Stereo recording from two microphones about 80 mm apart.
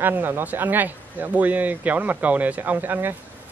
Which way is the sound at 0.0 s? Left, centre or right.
Right.